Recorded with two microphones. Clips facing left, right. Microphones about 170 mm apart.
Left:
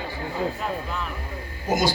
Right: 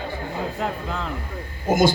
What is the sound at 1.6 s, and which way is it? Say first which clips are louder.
Speech: right 5 dB; 50° right (ahead or behind).